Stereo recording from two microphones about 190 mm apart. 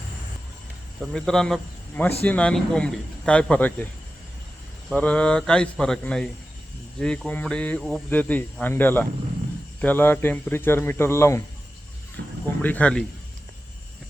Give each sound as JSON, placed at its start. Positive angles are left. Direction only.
{"t": 1.1, "sound": "a man's voice", "side_deg": 0}
{"t": 4.9, "sound": "a man's voice", "side_deg": 5}
{"t": 12.2, "sound": "a sound", "side_deg": -65}
{"t": 12.6, "sound": "speech", "side_deg": 5}